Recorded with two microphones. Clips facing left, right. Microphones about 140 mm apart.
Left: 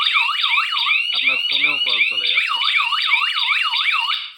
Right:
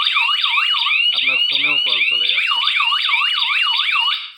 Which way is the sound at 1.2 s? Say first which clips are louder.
Even; 15° right (ahead or behind).